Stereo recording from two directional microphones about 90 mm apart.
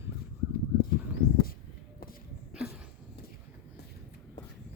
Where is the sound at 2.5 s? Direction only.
10° right (ahead or behind).